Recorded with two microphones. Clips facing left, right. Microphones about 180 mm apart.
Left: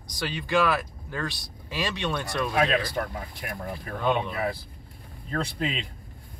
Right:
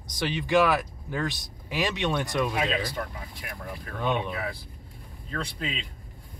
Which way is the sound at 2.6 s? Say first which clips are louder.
Left 4 dB; 60° left (ahead or behind).